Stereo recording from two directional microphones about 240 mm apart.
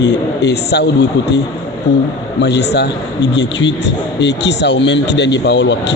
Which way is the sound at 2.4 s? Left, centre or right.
Left.